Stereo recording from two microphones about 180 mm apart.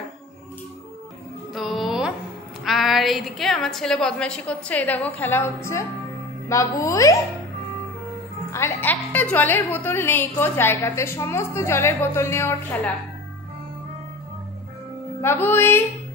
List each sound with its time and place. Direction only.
1.5 s music: centre (ahead or behind)
2.6 s a woman's voice: centre (ahead or behind); by 7.2 s 15° left (ahead or behind)
8.5 s a woman's voice: 15° left (ahead or behind)
15.2 s a woman's voice: 10° left (ahead or behind)